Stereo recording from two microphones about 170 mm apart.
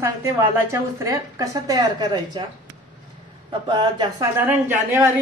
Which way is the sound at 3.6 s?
25° right (ahead or behind).